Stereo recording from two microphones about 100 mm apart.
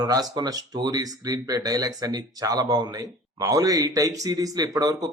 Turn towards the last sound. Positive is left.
turn(degrees=-35)  # may be behind; listen again after turning